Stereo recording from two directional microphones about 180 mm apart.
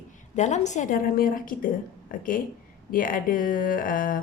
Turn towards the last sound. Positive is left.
turn(degrees=50)  # may be behind; listen again after turning